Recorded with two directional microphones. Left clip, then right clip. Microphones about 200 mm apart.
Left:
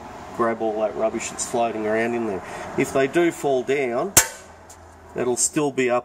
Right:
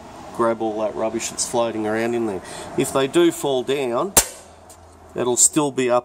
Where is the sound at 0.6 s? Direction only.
30° right (ahead or behind).